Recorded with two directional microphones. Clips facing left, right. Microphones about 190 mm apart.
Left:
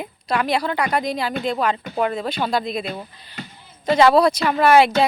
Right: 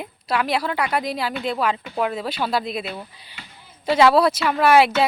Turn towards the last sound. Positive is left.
turn(degrees=-5)  # may be behind; listen again after turning